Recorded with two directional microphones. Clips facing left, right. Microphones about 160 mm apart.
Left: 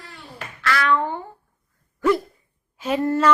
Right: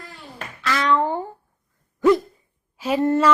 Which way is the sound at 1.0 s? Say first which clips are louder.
Right 4 dB; 35° right (ahead or behind).